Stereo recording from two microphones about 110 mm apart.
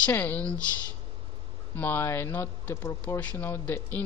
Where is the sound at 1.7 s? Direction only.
15° left (ahead or behind).